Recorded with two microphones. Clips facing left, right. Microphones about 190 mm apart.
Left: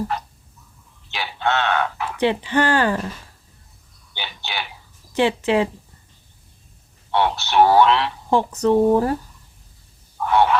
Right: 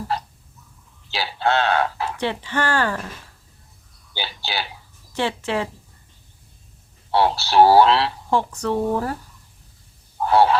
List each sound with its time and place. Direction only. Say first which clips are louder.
1.1 s a sound: right 2 dB; 30° right (ahead or behind)
2.2 s speech: left 6 dB; 15° left (ahead or behind)
4.1 s a sound: right 3 dB; 30° right (ahead or behind)
4.4 s speech: right 1 dB; 35° right (ahead or behind)
5.1 s speech: left 5 dB; 15° left (ahead or behind)
7.1 s speech: right 1 dB; 35° right (ahead or behind)
8.3 s speech: left 7 dB; 20° left (ahead or behind)
10.2 s speech: right 1 dB; 30° right (ahead or behind)